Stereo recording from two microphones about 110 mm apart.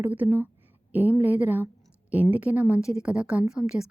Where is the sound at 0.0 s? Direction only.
15° right (ahead or behind).